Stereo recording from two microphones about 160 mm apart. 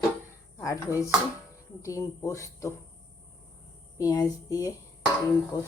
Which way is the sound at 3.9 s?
20° left (ahead or behind).